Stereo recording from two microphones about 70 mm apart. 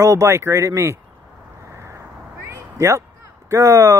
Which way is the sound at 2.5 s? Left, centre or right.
Right.